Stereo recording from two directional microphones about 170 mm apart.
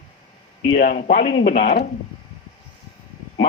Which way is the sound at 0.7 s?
65° left (ahead or behind).